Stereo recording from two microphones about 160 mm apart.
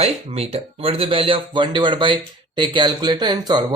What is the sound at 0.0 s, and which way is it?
Speech, 40° right (ahead or behind).